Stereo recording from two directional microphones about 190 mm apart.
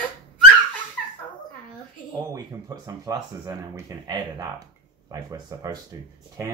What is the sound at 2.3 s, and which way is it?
Speech, 20° right (ahead or behind).